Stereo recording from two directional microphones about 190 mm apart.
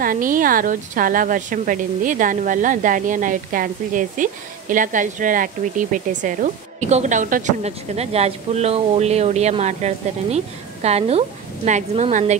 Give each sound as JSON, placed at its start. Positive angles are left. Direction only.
{"t": 0.0, "sound": "a woman's voice", "side_deg": -45}